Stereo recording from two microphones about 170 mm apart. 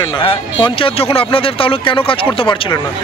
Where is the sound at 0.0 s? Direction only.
30° left (ahead or behind).